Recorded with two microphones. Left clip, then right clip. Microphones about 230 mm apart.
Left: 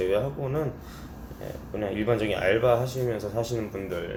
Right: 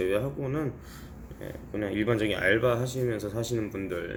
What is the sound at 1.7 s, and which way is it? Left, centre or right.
Speech, right.